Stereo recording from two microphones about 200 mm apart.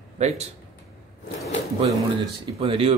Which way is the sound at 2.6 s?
30° right (ahead or behind).